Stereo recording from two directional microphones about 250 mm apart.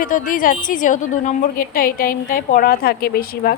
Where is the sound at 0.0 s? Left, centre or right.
Left.